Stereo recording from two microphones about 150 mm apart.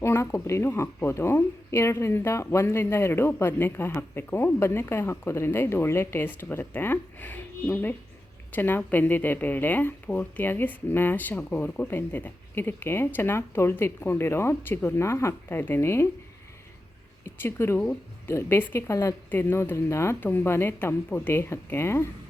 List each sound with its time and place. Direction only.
0.0 s speech: 15° left (ahead or behind)
17.2 s speech: 15° left (ahead or behind)